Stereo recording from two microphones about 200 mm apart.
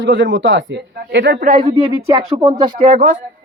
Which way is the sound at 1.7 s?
15° right (ahead or behind).